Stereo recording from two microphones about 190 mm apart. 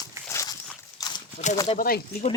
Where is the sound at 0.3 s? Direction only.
15° left (ahead or behind).